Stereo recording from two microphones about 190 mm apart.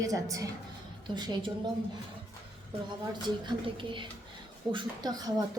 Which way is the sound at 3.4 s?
25° right (ahead or behind).